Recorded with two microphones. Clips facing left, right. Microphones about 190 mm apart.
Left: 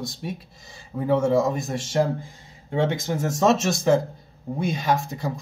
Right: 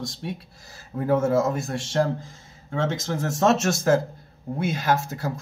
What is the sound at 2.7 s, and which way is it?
Speech, 15° left (ahead or behind).